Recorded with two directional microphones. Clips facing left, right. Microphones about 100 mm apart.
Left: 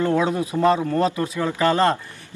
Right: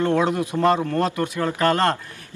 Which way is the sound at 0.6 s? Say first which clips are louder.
Left 1 dB; 10° left (ahead or behind).